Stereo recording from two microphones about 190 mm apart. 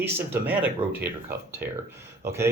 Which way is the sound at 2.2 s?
15° right (ahead or behind).